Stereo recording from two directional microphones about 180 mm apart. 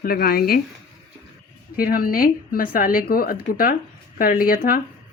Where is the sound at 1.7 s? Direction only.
55° left (ahead or behind).